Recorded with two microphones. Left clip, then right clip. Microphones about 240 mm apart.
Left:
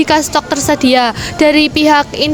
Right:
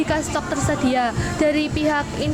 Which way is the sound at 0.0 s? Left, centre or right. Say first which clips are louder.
Left 11 dB; left.